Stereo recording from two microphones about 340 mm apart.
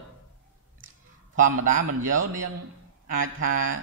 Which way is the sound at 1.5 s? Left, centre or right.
Right.